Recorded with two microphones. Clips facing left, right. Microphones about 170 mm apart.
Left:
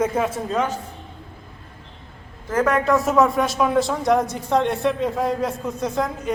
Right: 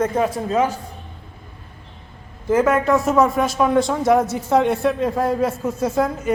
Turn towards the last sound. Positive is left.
turn(degrees=-5)  # may be behind; listen again after turning